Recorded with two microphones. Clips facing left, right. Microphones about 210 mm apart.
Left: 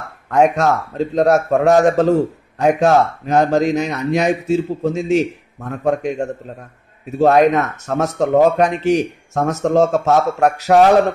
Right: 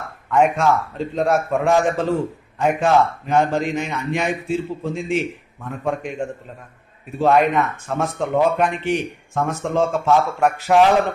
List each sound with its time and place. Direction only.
0.3 s a man's voice: 40° left (ahead or behind)